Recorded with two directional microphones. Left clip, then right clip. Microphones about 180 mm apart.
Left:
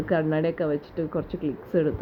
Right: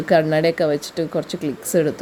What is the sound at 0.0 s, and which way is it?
A woman's voice, 45° right (ahead or behind).